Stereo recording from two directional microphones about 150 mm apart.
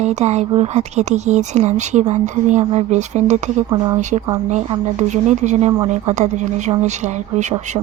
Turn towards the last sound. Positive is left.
turn(degrees=-50)  # may be behind; listen again after turning